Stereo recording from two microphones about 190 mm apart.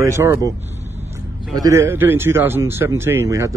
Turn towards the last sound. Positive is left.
turn(degrees=-15)  # may be behind; listen again after turning